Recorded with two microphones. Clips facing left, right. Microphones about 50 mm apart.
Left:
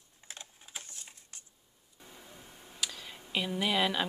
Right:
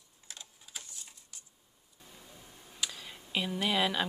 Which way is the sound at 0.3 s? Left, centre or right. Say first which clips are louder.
Left 2 dB; left.